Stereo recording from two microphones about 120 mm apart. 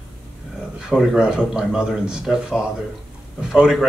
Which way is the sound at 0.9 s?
5° right (ahead or behind).